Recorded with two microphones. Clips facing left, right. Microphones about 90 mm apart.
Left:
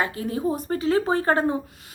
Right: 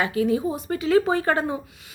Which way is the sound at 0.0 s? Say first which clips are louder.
Right 3 dB; 35° left (ahead or behind).